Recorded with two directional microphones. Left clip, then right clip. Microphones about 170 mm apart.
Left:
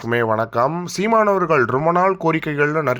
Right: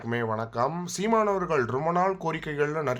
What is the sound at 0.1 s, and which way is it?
Speech, 45° left (ahead or behind).